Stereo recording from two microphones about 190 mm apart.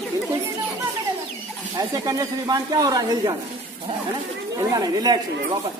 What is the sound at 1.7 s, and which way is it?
Speech, 20° right (ahead or behind).